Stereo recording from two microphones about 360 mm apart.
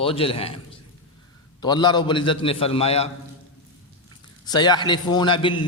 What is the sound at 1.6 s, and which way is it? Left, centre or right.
A man's voice, centre.